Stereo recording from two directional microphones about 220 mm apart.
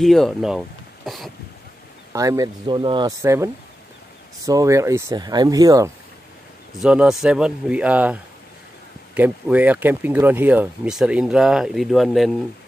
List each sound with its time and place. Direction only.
0.0 s speech: centre (ahead or behind)
2.1 s speech: 15° right (ahead or behind)
4.5 s speech: 15° right (ahead or behind)
6.8 s speech: 5° right (ahead or behind)